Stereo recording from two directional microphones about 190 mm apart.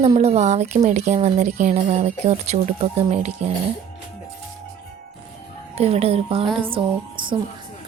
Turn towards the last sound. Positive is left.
turn(degrees=-25)  # may be behind; listen again after turning